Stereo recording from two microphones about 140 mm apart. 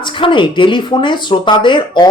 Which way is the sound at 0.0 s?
35° left (ahead or behind).